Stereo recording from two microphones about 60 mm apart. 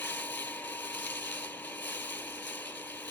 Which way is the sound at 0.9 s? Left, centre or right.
Left.